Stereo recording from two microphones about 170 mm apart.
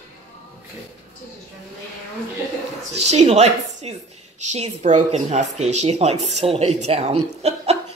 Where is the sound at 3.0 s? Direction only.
40° right (ahead or behind).